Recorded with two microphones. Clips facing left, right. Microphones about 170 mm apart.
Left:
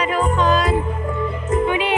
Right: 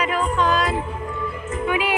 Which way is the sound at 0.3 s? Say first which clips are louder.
Left 2 dB; centre (ahead or behind).